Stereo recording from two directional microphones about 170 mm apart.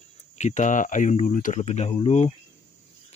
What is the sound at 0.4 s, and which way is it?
Speech, 45° left (ahead or behind).